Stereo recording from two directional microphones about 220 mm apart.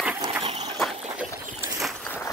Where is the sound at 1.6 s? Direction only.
Centre (ahead or behind).